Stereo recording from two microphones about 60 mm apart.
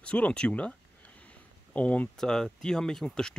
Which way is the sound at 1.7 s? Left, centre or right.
Left.